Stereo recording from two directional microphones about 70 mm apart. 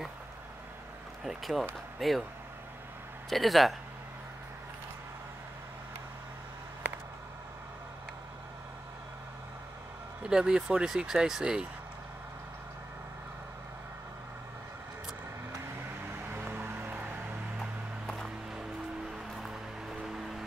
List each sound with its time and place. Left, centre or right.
1.2 s speech: centre
3.3 s speech: centre
10.2 s speech: centre
16.3 s music: right
17.6 s a sound: centre